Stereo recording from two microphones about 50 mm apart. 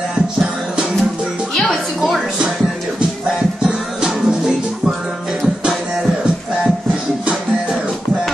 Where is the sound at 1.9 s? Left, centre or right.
Centre.